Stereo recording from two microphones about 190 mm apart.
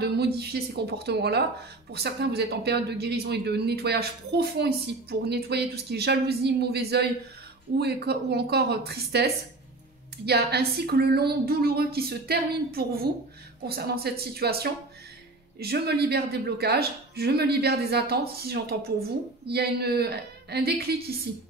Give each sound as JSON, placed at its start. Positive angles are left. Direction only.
{"t": 0.0, "sound": "speech", "side_deg": -60}